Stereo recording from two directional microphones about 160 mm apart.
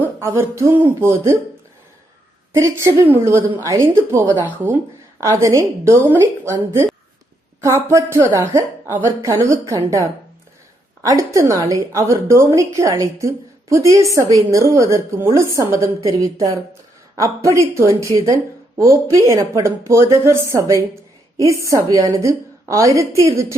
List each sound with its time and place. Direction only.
0.0 s a woman's voice: 15° right (ahead or behind)
2.5 s a woman's voice: 20° right (ahead or behind)